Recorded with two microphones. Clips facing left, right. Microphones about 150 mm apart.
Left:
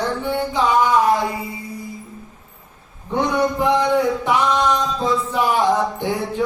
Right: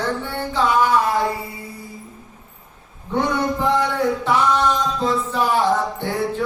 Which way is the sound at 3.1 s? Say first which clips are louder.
Left 2 dB; 15° left (ahead or behind).